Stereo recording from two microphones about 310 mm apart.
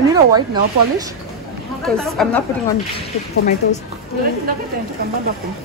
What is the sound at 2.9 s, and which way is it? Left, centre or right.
Speech, left.